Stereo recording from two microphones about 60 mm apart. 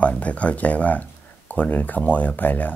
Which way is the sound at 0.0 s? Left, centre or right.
Left.